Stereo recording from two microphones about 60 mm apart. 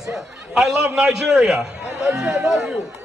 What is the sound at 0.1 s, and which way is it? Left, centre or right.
A man's voice, centre.